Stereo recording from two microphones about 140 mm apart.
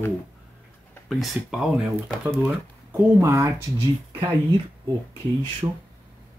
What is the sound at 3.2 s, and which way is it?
Speech, 15° right (ahead or behind).